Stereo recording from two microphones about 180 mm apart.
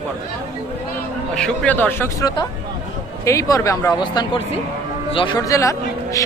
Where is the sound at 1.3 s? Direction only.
5° left (ahead or behind).